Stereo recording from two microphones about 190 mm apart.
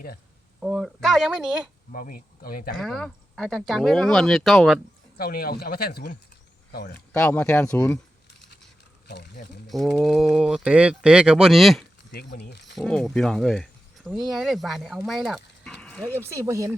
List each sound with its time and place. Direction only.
0.6 s speech: centre (ahead or behind)
1.9 s speech: 45° left (ahead or behind)
2.8 s speech: centre (ahead or behind)
5.1 s speech: 55° left (ahead or behind)
7.1 s speech: 10° left (ahead or behind)
9.0 s speech: 60° left (ahead or behind)
9.6 s speech: centre (ahead or behind)
12.1 s speech: 60° left (ahead or behind)
12.7 s speech: 5° left (ahead or behind)
16.1 s speech: 15° right (ahead or behind)